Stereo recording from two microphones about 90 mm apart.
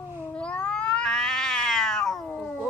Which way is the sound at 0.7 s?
10° left (ahead or behind).